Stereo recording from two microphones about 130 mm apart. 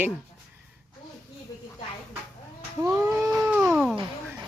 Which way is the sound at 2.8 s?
20° right (ahead or behind).